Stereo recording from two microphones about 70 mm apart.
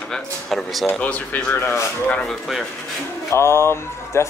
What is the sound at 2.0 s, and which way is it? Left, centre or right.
Speech, centre.